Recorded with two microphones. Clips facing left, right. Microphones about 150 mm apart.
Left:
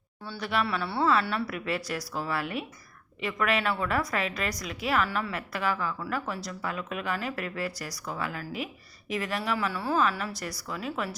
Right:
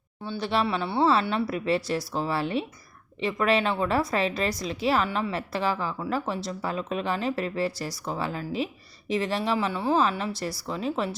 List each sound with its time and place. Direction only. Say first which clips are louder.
0.3 s a woman's voice: right 3 dB; 25° right (ahead or behind)